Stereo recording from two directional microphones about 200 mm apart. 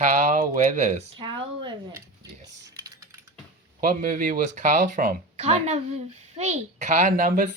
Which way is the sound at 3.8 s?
45° right (ahead or behind).